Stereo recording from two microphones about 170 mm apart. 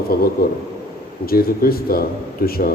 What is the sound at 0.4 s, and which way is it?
A man's voice, 65° left (ahead or behind).